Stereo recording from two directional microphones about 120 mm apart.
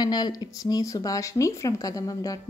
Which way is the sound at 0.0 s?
35° left (ahead or behind).